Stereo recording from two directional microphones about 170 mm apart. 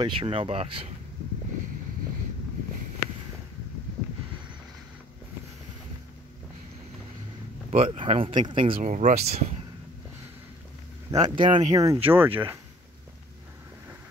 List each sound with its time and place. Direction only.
0.0 s speech: 30° right (ahead or behind)
7.7 s speech: 35° right (ahead or behind)
8.9 s speech: 45° right (ahead or behind)
11.1 s speech: 25° right (ahead or behind)